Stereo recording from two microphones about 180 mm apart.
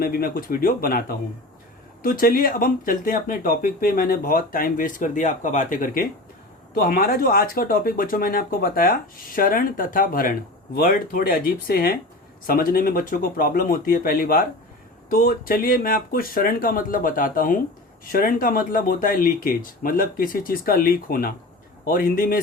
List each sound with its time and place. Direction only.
0.0 s speech: 55° left (ahead or behind)